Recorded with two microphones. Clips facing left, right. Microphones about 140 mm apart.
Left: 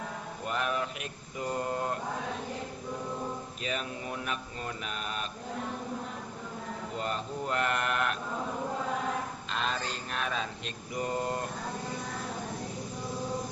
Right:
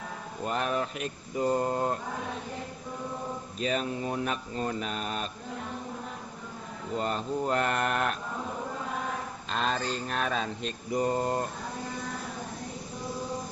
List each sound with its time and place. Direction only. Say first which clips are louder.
0.4 s mantra: right 3 dB; 35° right (ahead or behind)
3.6 s mantra: right 8 dB; 35° right (ahead or behind)
7.0 s mantra: right 5 dB; 35° right (ahead or behind)
9.5 s mantra: right 5 dB; 40° right (ahead or behind)